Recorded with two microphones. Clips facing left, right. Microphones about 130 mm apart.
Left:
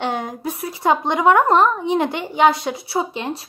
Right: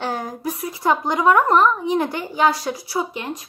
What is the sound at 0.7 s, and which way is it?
A woman's voice, 25° left (ahead or behind).